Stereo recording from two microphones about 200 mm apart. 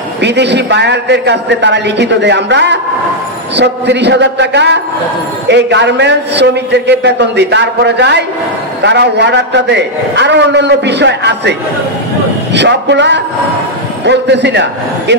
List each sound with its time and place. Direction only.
0.2 s a man's voice: 60° right (ahead or behind)
12.5 s a man's voice: 60° right (ahead or behind)